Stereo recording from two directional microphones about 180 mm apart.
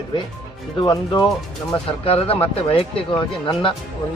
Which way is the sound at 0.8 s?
20° left (ahead or behind).